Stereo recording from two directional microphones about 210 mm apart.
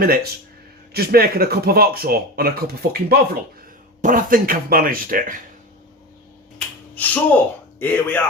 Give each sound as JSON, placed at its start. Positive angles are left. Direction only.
{"t": 0.0, "sound": "speech", "side_deg": -45}
{"t": 6.6, "sound": "finger snapping", "side_deg": 5}
{"t": 7.8, "sound": "a man's voice", "side_deg": 10}